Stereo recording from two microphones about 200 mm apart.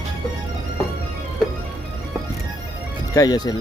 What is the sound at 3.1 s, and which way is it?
Speech, 20° left (ahead or behind).